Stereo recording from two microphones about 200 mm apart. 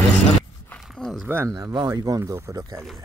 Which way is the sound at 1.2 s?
10° right (ahead or behind).